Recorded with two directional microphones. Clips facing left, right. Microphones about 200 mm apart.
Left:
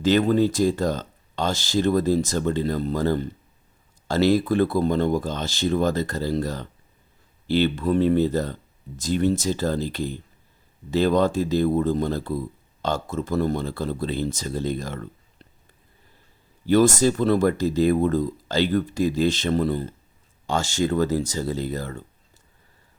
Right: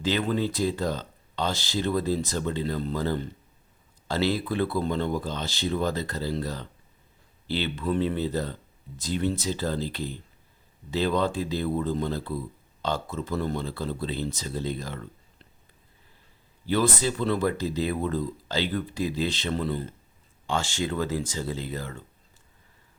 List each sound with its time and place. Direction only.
0.0 s speech: 45° left (ahead or behind)
16.6 s speech: 45° left (ahead or behind)